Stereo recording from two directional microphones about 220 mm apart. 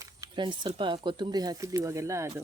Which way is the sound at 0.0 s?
20° right (ahead or behind).